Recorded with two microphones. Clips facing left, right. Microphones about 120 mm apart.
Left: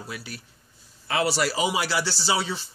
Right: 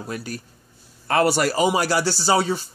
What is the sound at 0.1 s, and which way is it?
A man's voice, 45° right (ahead or behind).